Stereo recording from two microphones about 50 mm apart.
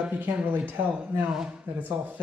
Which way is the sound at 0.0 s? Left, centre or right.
Right.